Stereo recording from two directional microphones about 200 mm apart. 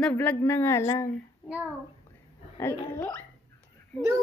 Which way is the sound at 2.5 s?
10° left (ahead or behind).